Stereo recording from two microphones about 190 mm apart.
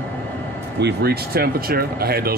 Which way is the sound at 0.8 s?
60° right (ahead or behind).